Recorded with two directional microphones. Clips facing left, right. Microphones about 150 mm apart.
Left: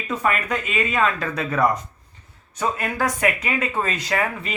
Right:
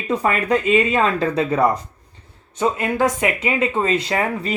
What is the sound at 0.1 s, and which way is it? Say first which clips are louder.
Speech: right 5 dB; 30° right (ahead or behind).